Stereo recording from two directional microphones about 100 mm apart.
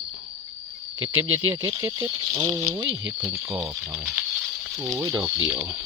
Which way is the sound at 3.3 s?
30° right (ahead or behind).